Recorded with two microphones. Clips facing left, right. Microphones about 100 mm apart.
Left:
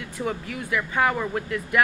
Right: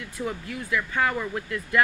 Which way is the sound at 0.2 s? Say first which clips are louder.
Left 2 dB; 15° left (ahead or behind).